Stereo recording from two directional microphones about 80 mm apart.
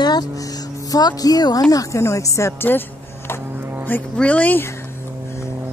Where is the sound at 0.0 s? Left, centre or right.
Left.